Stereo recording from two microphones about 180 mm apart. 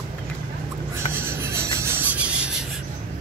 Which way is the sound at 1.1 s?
15° right (ahead or behind).